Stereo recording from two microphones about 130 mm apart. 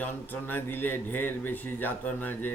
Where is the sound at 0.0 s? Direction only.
15° left (ahead or behind).